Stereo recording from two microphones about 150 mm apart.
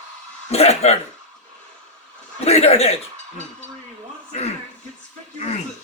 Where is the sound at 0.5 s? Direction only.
45° left (ahead or behind).